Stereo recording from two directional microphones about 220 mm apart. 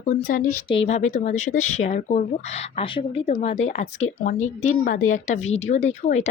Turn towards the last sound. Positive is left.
turn(degrees=30)  # may be behind; listen again after turning